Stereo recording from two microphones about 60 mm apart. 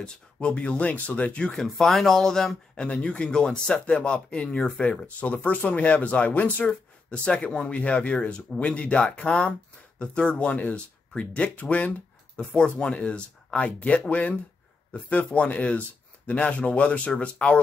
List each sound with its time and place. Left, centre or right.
0.0 s speech: centre
1.5 s speech: centre